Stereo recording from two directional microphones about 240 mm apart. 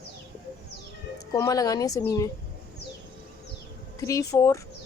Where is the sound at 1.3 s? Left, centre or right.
Centre.